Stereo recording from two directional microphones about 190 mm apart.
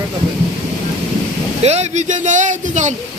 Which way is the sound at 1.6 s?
35° right (ahead or behind).